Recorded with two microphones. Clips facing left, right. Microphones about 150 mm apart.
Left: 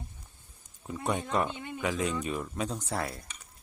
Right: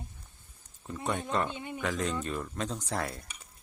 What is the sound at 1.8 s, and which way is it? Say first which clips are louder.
Speech: left 2 dB; 10° left (ahead or behind).